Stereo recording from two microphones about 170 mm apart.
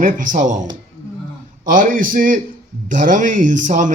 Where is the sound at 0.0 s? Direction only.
50° right (ahead or behind).